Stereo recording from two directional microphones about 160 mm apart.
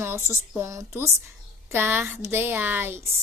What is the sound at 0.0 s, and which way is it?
A woman's voice, 15° right (ahead or behind).